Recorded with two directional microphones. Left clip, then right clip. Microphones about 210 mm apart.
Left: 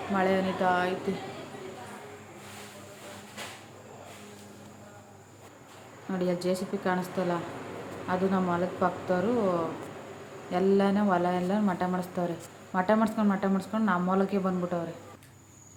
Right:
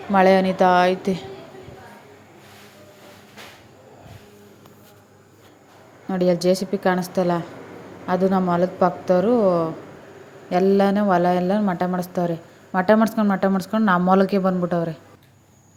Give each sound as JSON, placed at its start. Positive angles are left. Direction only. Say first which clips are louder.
{"t": 0.1, "sound": "a woman's voice", "louder": "right 12 dB", "side_deg": -40}
{"t": 6.1, "sound": "a woman's voice", "louder": "right 11 dB", "side_deg": -35}